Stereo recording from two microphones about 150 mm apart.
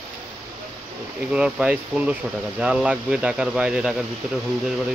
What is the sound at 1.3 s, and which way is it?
Speech, 5° right (ahead or behind).